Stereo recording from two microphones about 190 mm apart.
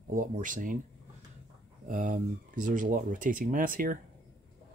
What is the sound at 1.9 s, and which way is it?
Speech, 45° right (ahead or behind).